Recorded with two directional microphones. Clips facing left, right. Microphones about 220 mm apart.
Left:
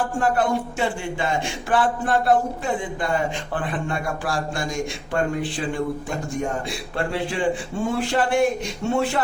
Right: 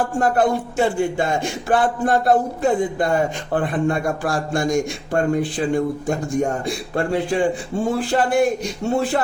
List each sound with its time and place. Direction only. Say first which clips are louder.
0.2 s speech: right 3 dB; 40° right (ahead or behind)